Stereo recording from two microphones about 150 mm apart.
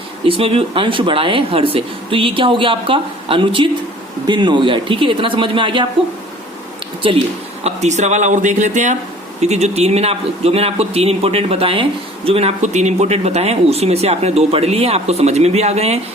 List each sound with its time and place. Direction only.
0.3 s speech: 35° right (ahead or behind)
7.0 s speech: 35° right (ahead or behind)
7.6 s speech: 50° right (ahead or behind)